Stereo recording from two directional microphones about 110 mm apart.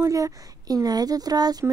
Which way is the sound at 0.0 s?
30° right (ahead or behind).